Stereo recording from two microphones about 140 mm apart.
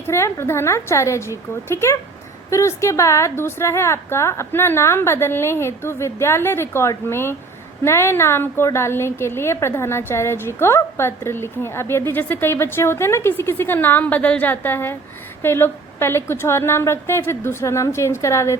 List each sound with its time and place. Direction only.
0.0 s a woman's voice: 20° left (ahead or behind)